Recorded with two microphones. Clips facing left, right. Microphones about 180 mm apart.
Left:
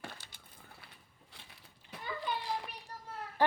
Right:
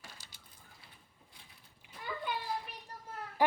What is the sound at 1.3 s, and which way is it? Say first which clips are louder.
Crushing: left 6 dB; 80° left.